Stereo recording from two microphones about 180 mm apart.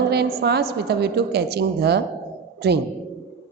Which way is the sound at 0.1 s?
60° right (ahead or behind).